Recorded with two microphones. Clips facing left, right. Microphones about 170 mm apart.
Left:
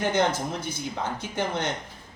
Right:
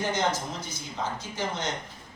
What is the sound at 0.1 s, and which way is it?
A man's voice, 55° left (ahead or behind).